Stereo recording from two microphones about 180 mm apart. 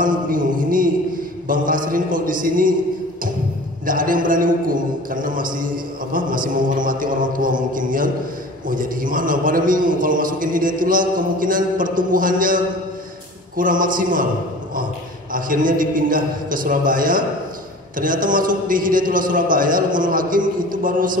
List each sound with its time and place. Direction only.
0.0 s music: 50° right (ahead or behind)
1.5 s a man's voice: 50° right (ahead or behind)
3.8 s a man's voice: 50° right (ahead or behind)
15.3 s a man's voice: 50° right (ahead or behind)